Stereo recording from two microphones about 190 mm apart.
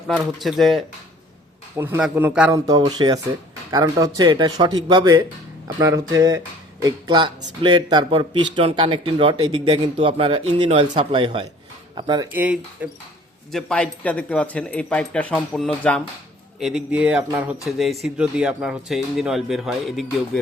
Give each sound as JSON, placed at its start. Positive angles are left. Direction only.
{"t": 0.3, "sound": "speech", "side_deg": 0}
{"t": 2.0, "sound": "a man's voice", "side_deg": -5}
{"t": 2.6, "sound": "a man's voice", "side_deg": -20}
{"t": 12.3, "sound": "a man's voice", "side_deg": -10}
{"t": 13.5, "sound": "a man's voice", "side_deg": 0}